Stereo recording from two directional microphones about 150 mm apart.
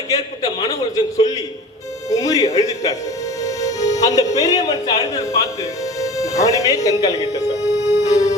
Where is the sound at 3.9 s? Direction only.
25° left (ahead or behind).